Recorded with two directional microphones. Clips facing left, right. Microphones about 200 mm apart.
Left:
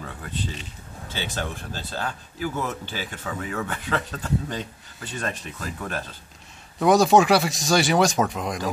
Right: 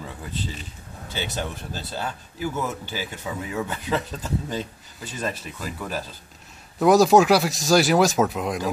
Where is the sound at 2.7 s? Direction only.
10° right (ahead or behind).